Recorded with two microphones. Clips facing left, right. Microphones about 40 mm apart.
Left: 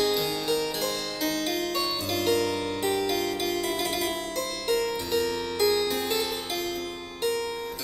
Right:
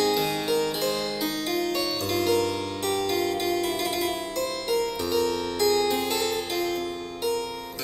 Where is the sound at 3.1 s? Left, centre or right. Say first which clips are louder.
Right 2 dB; centre.